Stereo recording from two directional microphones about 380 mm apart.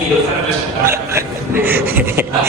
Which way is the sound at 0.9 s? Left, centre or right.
Centre.